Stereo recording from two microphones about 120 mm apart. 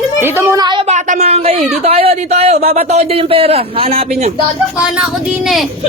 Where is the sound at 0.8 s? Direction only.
75° right (ahead or behind).